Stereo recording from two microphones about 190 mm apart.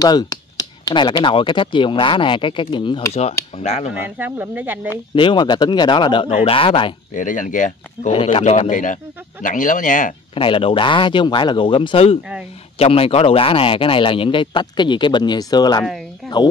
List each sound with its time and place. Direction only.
0.0 s speech: 20° left (ahead or behind); by 3.9 s 35° left (ahead or behind)
3.9 s speech: 10° right (ahead or behind)
4.8 s speech: 25° left (ahead or behind)
7.2 s speech: 40° left (ahead or behind)
8.1 s a man's voice: 30° left (ahead or behind); by 10.1 s 45° left (ahead or behind)
10.3 s speech: 30° left (ahead or behind)